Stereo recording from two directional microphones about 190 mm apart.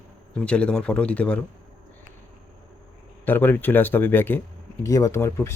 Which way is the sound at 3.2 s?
10° left (ahead or behind).